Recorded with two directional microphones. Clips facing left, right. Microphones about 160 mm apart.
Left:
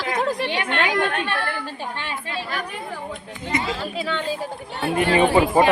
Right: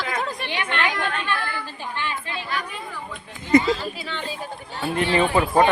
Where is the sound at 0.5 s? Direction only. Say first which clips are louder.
Left 3 dB; 55° left (ahead or behind).